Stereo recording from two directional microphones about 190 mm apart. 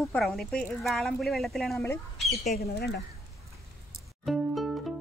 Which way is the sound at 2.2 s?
35° left (ahead or behind).